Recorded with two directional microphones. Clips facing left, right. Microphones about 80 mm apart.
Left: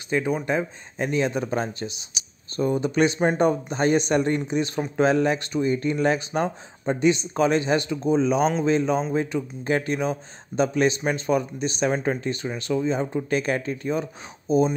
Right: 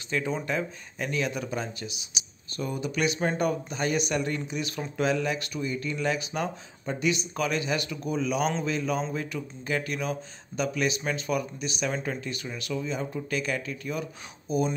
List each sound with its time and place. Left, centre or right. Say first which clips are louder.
0.1 s speech: left 5 dB; left